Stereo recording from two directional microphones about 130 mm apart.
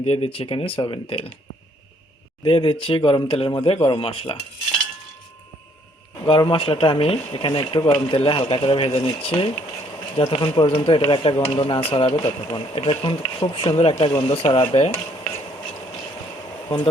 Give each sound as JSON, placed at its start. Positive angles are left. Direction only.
{"t": 0.0, "sound": "speech", "side_deg": 50}
{"t": 2.4, "sound": "speech", "side_deg": 40}
{"t": 6.2, "sound": "speech", "side_deg": 40}
{"t": 7.8, "sound": "speech", "side_deg": 25}
{"t": 8.0, "sound": "speech", "side_deg": 45}
{"t": 14.5, "sound": "dishes", "side_deg": 45}